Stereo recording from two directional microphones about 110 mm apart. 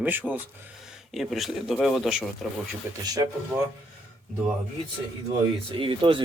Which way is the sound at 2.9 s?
20° right (ahead or behind).